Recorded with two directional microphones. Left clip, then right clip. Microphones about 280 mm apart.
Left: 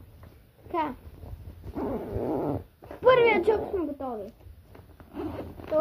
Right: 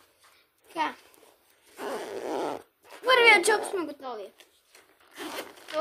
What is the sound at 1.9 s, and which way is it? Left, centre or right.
Zipper, right.